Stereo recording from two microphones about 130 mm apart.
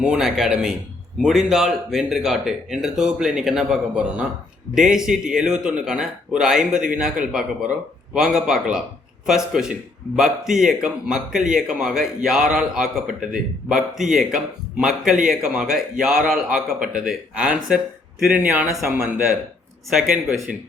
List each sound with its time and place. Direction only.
0.0 s speech: 5° right (ahead or behind)
18.9 s speech: 20° right (ahead or behind)
20.5 s speech: 5° right (ahead or behind)